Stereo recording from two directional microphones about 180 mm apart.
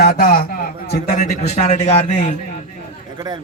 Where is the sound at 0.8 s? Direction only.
40° left (ahead or behind).